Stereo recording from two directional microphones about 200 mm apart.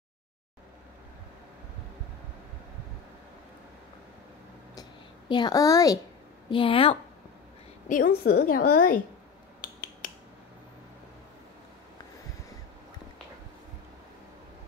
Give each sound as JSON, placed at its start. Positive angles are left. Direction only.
{"t": 5.3, "sound": "a woman's voice", "side_deg": 20}
{"t": 7.9, "sound": "a woman's voice", "side_deg": 45}
{"t": 9.6, "sound": "mechanisms", "side_deg": 45}
{"t": 10.0, "sound": "a sound", "side_deg": 45}